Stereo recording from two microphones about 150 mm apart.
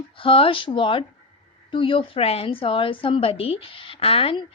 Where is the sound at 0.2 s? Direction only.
35° left (ahead or behind).